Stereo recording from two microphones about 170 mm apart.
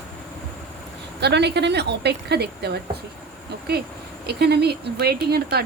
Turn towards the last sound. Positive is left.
turn(degrees=-70)  # may be behind; listen again after turning